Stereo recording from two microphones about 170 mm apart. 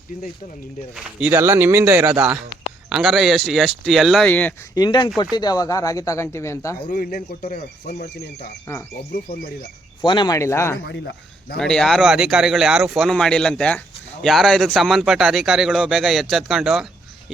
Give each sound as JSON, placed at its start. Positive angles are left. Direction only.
{"t": 0.9, "sound": "speech", "side_deg": -10}
{"t": 4.3, "sound": "speech", "side_deg": 10}
{"t": 4.7, "sound": "speech", "side_deg": 25}
{"t": 6.9, "sound": "speech", "side_deg": 55}
{"t": 8.0, "sound": "speech", "side_deg": 70}
{"t": 10.0, "sound": "speech", "side_deg": 25}
{"t": 10.8, "sound": "speech", "side_deg": 70}
{"t": 11.5, "sound": "speech", "side_deg": 5}